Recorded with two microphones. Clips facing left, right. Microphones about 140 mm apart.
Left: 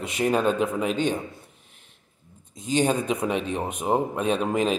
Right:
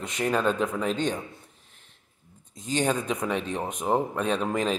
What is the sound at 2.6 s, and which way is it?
A man's voice, 15° left (ahead or behind).